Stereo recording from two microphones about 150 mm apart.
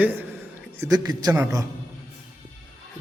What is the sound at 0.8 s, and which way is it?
Speech, 25° right (ahead or behind).